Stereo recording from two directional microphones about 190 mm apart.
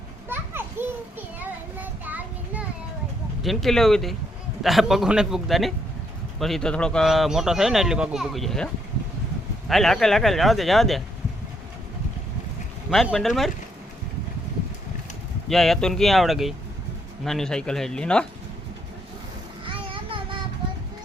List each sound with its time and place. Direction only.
0.3 s children playing: 10° right (ahead or behind)
1.4 s child singing: 10° right (ahead or behind)
3.4 s speech: centre (ahead or behind)
12.9 s speech: centre (ahead or behind)
15.4 s speech: centre (ahead or behind)
19.6 s child singing: 30° right (ahead or behind)